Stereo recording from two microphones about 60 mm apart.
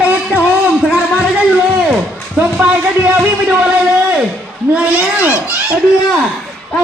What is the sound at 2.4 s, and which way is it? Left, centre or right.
Speech, right.